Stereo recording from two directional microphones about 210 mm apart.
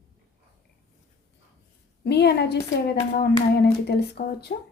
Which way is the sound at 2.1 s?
50° left (ahead or behind).